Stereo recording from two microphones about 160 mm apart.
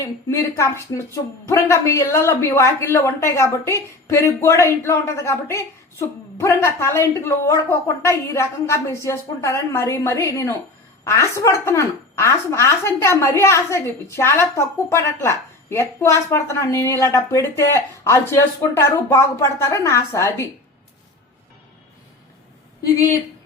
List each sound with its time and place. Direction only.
0.0 s speech: 20° left (ahead or behind)